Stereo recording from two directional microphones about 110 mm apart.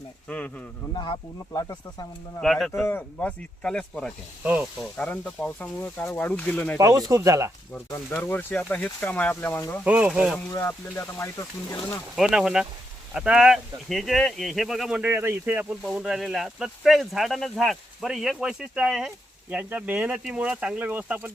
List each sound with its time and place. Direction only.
0.3 s speech: 10° left (ahead or behind)
0.9 s speech: 45° left (ahead or behind)
2.4 s speech: centre (ahead or behind)
2.8 s speech: 15° left (ahead or behind)
6.7 s speech: 30° right (ahead or behind)
8.1 s speech: 20° left (ahead or behind)
9.8 s speech: 15° right (ahead or behind)
10.1 s speech: centre (ahead or behind)
10.6 s speech: 25° left (ahead or behind)
12.1 s speech: 5° right (ahead or behind)